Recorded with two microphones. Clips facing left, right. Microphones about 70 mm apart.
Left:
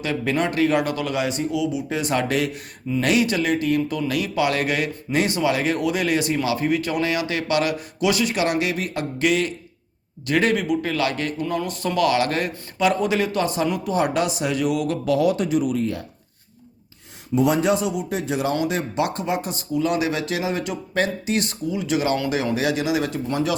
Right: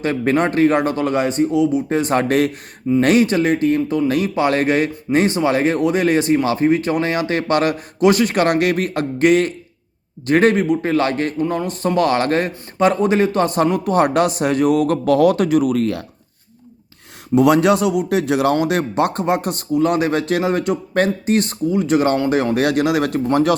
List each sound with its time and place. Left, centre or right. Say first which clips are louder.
0.0 s a man's voice: right 6 dB; right
17.3 s speech: right 6 dB; right
18.5 s speech: right 5 dB; right